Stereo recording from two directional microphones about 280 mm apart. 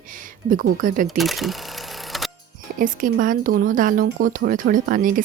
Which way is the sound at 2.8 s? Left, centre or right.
Right.